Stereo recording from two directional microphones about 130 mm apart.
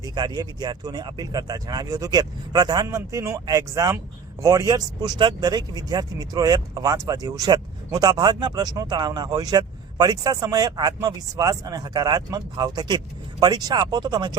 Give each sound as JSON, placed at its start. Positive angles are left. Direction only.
{"t": 0.0, "sound": "speech", "side_deg": -35}